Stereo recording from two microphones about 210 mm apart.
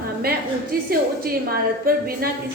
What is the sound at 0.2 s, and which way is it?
A woman's voice, 45° right (ahead or behind).